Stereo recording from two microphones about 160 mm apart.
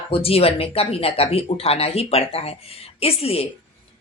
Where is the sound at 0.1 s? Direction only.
35° left (ahead or behind).